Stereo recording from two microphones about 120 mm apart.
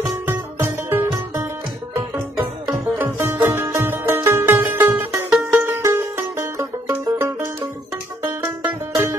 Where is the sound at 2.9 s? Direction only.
20° right (ahead or behind).